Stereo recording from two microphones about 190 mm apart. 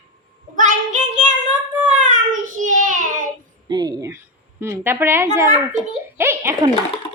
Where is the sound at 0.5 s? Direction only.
40° right (ahead or behind).